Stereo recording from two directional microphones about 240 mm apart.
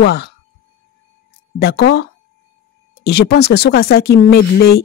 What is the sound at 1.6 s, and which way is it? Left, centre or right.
Speech, left.